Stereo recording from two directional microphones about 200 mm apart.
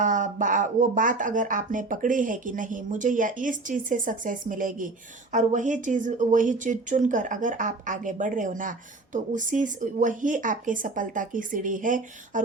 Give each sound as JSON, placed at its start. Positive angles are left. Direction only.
{"t": 0.0, "sound": "speech", "side_deg": -40}